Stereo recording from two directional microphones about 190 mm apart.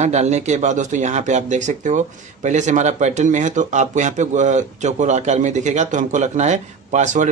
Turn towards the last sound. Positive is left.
turn(degrees=-40)  # may be behind; listen again after turning